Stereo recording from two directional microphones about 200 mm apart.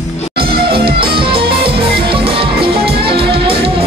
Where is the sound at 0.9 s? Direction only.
25° right (ahead or behind).